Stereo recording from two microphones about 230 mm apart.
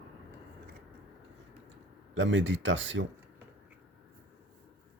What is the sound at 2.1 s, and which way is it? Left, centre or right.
Speech, right.